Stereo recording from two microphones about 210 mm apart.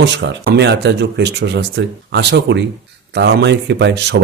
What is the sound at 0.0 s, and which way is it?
Speech, 55° right (ahead or behind).